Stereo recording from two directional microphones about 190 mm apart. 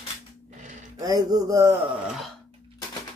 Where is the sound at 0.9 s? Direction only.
20° right (ahead or behind).